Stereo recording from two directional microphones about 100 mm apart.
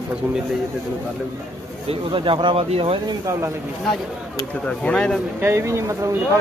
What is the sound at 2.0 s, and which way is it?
Speech, 55° right (ahead or behind).